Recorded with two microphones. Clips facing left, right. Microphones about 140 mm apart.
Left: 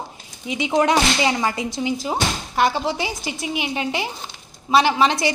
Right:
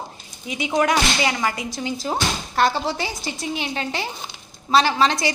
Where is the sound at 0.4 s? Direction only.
20° left (ahead or behind).